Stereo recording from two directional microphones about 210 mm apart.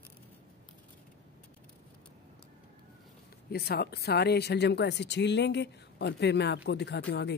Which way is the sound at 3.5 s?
50° left (ahead or behind).